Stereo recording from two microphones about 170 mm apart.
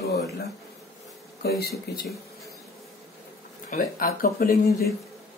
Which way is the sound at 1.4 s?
65° left (ahead or behind).